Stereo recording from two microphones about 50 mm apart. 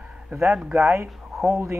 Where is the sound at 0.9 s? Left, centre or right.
Right.